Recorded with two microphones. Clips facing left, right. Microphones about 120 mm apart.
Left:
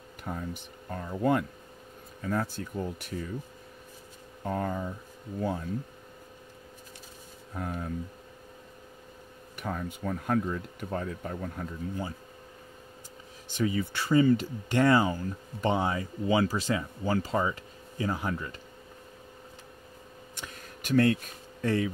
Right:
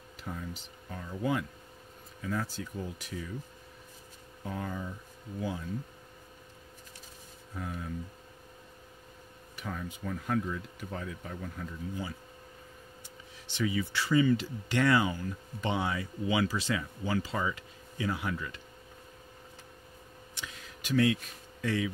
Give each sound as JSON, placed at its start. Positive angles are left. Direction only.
{"t": 0.2, "sound": "speech", "side_deg": 55}
{"t": 4.5, "sound": "speech", "side_deg": 50}
{"t": 7.5, "sound": "speech", "side_deg": 50}
{"t": 9.6, "sound": "speech", "side_deg": 50}
{"t": 13.5, "sound": "speech", "side_deg": 45}
{"t": 20.3, "sound": "a sound", "side_deg": 45}